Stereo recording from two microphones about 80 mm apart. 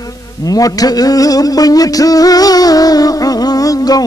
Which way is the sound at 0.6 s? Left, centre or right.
Left.